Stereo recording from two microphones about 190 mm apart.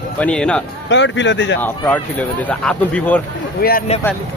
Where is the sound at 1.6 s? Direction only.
10° left (ahead or behind).